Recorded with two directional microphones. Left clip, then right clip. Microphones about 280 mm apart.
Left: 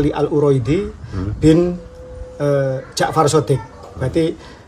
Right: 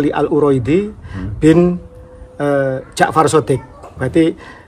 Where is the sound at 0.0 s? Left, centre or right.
Right.